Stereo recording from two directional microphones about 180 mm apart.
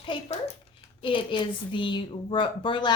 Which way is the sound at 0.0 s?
30° left (ahead or behind).